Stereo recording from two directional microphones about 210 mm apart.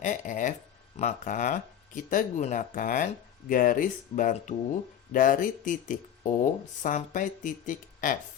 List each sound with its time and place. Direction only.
0.0 s speech: 35° left (ahead or behind)